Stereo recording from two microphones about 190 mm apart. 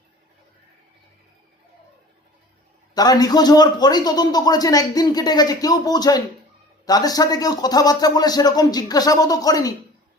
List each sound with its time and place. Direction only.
2.9 s a man's voice: 20° left (ahead or behind)